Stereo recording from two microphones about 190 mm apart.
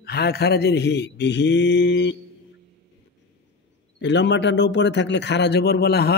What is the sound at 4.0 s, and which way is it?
A man's voice, 65° left (ahead or behind).